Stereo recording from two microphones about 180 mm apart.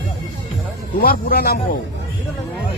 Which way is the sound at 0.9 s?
55° left (ahead or behind).